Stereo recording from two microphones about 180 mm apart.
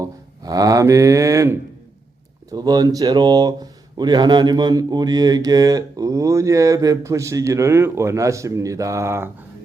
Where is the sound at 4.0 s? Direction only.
25° right (ahead or behind).